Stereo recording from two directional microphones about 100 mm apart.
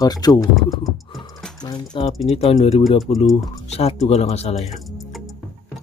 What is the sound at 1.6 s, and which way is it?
Speech, 45° left (ahead or behind).